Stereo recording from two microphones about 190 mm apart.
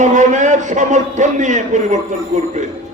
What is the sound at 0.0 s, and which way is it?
A man's voice, 40° right (ahead or behind).